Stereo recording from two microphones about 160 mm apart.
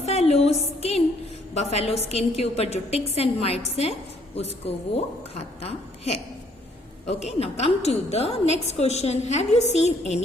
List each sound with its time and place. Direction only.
0.0 s a sound: 40° left (ahead or behind)
0.8 s music: 40° left (ahead or behind)
1.5 s a woman's voice: 40° left (ahead or behind)